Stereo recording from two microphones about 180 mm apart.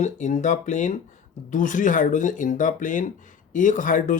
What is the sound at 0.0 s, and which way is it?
Speech, 40° left (ahead or behind).